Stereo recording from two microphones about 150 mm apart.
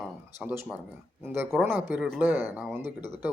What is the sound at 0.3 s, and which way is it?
A man's voice, 15° right (ahead or behind).